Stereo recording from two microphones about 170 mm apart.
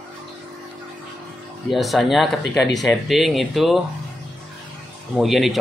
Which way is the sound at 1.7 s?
Centre (ahead or behind).